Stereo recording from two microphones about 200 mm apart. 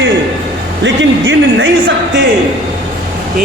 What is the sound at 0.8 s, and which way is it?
Music, 65° right (ahead or behind).